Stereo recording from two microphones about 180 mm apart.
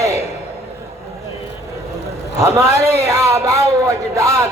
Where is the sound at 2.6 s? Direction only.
15° right (ahead or behind).